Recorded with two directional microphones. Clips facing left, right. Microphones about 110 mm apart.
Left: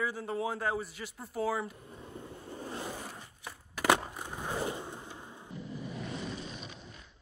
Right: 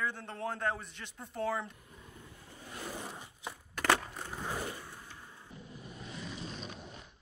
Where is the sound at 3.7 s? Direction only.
10° left (ahead or behind).